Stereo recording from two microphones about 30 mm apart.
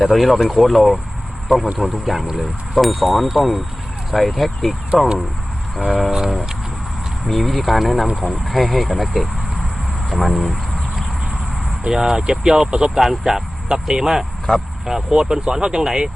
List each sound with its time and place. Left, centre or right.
0.0 s speech: centre
7.3 s speech: centre
11.9 s speech: centre
12.7 s speech: right
13.0 s speech: centre
13.7 s speech: right
14.5 s speech: left
15.1 s speech: right